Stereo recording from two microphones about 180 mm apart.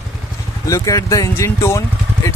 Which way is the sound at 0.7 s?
20° left (ahead or behind).